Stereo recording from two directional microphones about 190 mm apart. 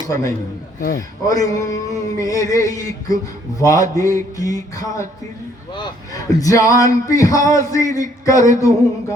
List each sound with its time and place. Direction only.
0.0 s a man's voice: 20° left (ahead or behind)